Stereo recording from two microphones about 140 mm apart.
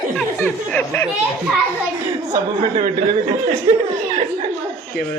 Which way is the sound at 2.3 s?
30° right (ahead or behind).